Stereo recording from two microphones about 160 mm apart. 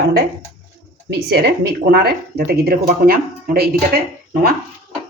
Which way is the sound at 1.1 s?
90° right.